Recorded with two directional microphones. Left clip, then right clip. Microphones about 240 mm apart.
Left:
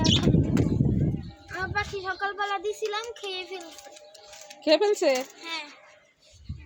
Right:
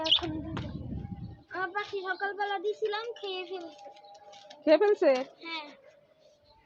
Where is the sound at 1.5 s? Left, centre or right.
Centre.